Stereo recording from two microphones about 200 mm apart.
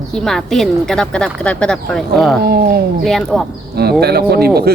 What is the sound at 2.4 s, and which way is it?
Speech, 50° right (ahead or behind).